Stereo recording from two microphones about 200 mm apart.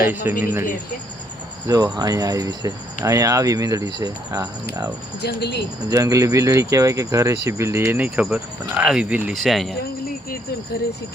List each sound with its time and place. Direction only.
0.0 s speech: 10° right (ahead or behind)
1.6 s speech: 15° right (ahead or behind)
5.2 s speech: 55° left (ahead or behind)
5.9 s speech: 15° right (ahead or behind); by 9.7 s centre (ahead or behind)